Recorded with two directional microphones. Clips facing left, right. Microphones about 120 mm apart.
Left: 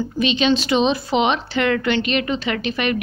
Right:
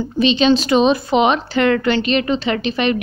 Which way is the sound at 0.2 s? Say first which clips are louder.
Right 5 dB; 30° right (ahead or behind).